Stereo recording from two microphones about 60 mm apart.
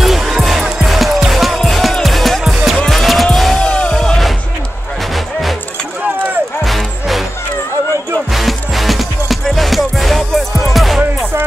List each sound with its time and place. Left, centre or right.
0.0 s music: centre
3.5 s music: centre
5.1 s music: centre
6.6 s music: centre
8.3 s music: centre